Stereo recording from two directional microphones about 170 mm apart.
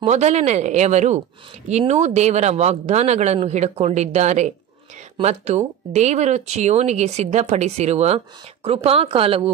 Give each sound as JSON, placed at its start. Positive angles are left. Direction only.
{"t": 0.0, "sound": "speech", "side_deg": -40}